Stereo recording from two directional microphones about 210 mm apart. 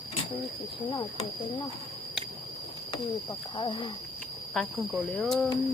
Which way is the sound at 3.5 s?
25° left (ahead or behind).